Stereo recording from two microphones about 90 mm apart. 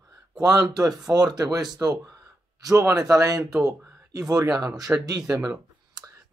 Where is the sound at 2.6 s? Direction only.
40° right (ahead or behind).